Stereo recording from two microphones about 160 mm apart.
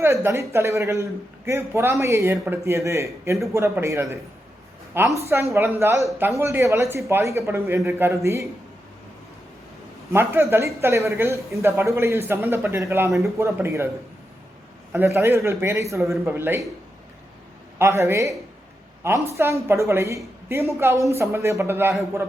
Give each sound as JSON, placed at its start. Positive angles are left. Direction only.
{"t": 0.0, "sound": "a man's voice", "side_deg": -15}
{"t": 10.1, "sound": "a man's voice", "side_deg": -15}
{"t": 14.9, "sound": "a man's voice", "side_deg": -15}
{"t": 17.7, "sound": "a man's voice", "side_deg": -15}